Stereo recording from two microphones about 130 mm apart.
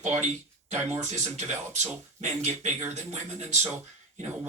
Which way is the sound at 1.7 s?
65° right (ahead or behind).